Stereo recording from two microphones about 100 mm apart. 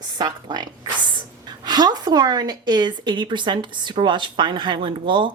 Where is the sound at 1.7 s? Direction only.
45° right (ahead or behind).